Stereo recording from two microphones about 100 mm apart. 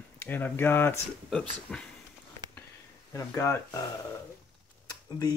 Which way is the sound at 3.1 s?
30° left (ahead or behind).